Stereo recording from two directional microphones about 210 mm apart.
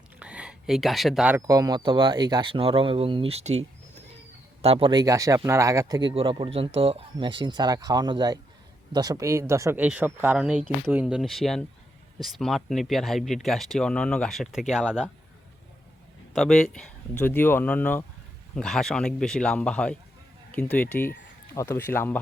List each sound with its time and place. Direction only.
0.2 s a sound: 5° right (ahead or behind)
1.4 s speech: 15° right (ahead or behind)
16.3 s speech: centre (ahead or behind)